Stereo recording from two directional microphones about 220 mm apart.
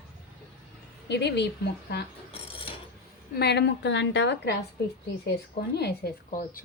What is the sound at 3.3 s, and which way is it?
Speech, 50° left (ahead or behind).